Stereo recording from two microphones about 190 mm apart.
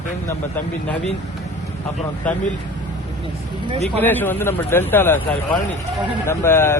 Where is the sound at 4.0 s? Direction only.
10° left (ahead or behind).